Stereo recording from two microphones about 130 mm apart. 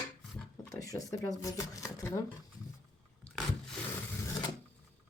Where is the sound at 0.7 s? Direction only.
25° left (ahead or behind).